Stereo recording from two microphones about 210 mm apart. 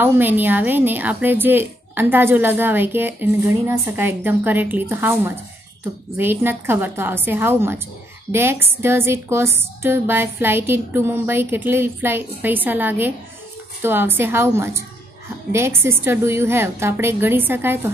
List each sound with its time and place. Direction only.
0.0 s a woman's voice: 10° right (ahead or behind)